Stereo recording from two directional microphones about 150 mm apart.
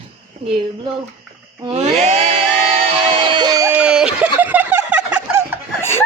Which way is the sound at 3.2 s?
30° right (ahead or behind).